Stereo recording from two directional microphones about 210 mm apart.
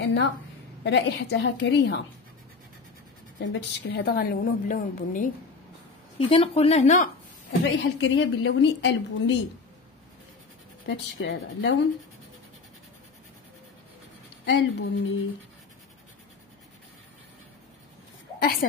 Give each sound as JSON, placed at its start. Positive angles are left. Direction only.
{"t": 0.0, "sound": "a woman's voice", "side_deg": 55}
{"t": 3.3, "sound": "a woman's voice", "side_deg": 55}
{"t": 6.1, "sound": "speech", "side_deg": 25}
{"t": 7.6, "sound": "a woman's voice", "side_deg": 60}
{"t": 10.9, "sound": "a woman's voice", "side_deg": 65}
{"t": 14.4, "sound": "speech", "side_deg": 65}
{"t": 18.6, "sound": "a woman's voice", "side_deg": 40}